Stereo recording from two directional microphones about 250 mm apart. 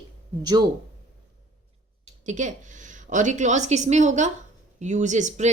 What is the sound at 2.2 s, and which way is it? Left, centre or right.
A woman's voice, right.